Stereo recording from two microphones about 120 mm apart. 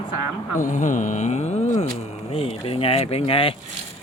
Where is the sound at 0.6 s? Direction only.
90° left; by 1.9 s 75° left (ahead or behind).